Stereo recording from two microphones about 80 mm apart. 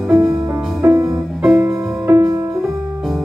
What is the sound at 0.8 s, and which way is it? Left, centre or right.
Music, right.